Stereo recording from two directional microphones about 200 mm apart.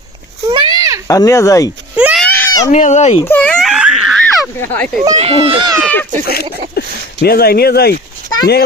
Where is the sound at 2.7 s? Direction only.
35° left (ahead or behind).